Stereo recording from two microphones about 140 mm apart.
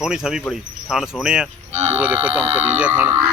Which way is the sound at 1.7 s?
50° right (ahead or behind).